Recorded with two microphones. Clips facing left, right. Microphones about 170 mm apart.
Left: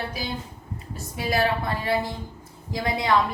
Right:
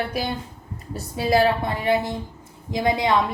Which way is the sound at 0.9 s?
25° right (ahead or behind).